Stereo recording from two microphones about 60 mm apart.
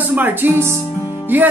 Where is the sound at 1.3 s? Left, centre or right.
Right.